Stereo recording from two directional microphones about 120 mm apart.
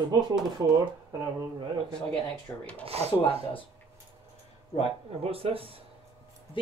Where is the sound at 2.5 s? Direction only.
20° left (ahead or behind).